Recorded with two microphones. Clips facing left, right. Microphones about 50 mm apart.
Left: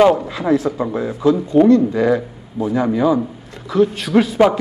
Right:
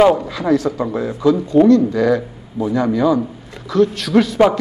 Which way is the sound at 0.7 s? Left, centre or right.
Centre.